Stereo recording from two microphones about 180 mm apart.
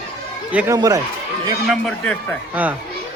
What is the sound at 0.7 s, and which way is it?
Speech, 20° right (ahead or behind).